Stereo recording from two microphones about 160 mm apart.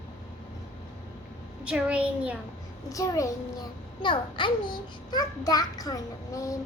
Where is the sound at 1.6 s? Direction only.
5° right (ahead or behind).